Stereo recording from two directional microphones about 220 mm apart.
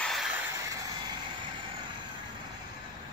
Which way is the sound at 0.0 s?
Centre (ahead or behind).